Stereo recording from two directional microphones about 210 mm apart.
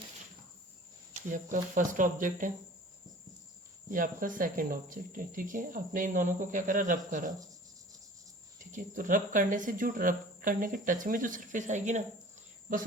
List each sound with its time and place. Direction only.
1.1 s speech: 40° right (ahead or behind)
3.9 s speech: 40° right (ahead or behind)
8.7 s speech: 40° right (ahead or behind)